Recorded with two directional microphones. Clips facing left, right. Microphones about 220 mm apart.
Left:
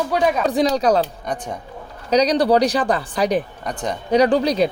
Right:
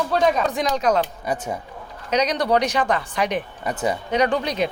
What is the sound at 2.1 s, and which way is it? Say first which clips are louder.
Speech: left 5 dB; 35° left (ahead or behind).